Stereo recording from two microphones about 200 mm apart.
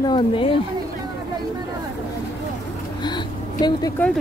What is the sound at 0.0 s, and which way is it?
Speech, 25° left (ahead or behind).